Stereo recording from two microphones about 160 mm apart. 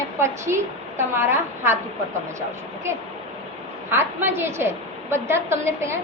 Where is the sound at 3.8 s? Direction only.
15° right (ahead or behind).